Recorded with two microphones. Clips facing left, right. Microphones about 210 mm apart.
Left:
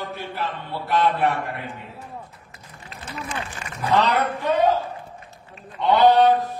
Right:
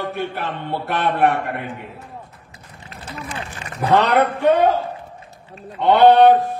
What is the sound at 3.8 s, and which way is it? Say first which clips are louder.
Mantra: right 5 dB; 55° right (ahead or behind).